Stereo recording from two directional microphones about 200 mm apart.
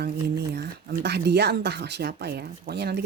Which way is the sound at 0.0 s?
55° right (ahead or behind).